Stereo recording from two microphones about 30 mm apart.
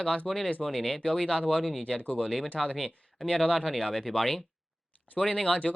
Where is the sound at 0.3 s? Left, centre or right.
Centre.